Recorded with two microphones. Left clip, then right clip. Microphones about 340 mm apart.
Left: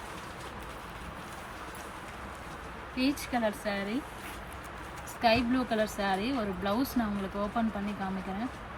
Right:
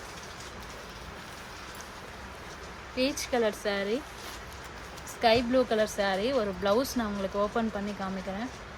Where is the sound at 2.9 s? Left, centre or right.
Right.